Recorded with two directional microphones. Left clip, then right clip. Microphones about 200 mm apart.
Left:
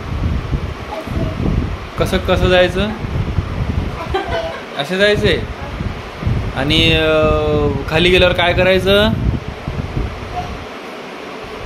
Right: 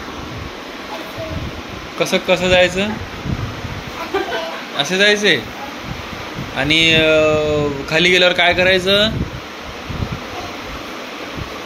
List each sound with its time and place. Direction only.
2.0 s speech: 25° left (ahead or behind)
4.7 s speech: 20° left (ahead or behind)
6.5 s speech: 20° left (ahead or behind)